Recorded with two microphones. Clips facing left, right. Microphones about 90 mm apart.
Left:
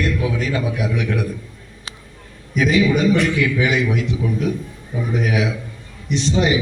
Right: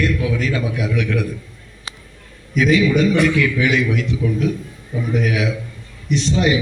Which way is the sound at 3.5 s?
30° left (ahead or behind).